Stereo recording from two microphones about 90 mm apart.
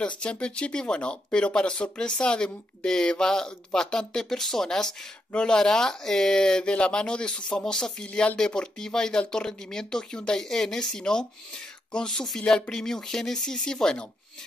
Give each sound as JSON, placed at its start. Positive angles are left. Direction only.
{"t": 0.2, "sound": "speech", "side_deg": 10}